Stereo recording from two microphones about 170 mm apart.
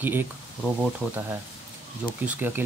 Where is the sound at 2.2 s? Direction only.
10° right (ahead or behind).